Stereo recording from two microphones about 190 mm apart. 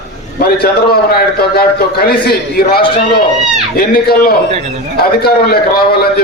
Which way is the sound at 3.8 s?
50° left (ahead or behind).